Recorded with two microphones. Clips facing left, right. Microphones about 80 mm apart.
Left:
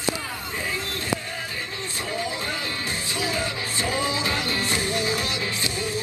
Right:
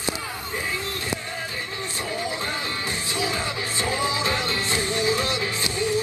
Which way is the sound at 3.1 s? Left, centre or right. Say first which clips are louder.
Even; right.